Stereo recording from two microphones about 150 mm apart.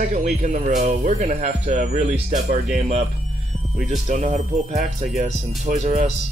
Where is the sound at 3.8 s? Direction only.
55° right (ahead or behind).